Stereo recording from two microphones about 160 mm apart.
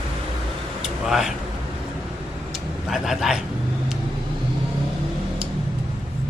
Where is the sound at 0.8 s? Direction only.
Centre (ahead or behind).